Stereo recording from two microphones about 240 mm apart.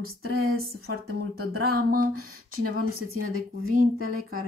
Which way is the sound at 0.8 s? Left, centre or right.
Right.